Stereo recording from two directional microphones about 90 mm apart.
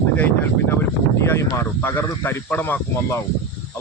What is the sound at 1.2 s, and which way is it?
Speech, 30° left (ahead or behind).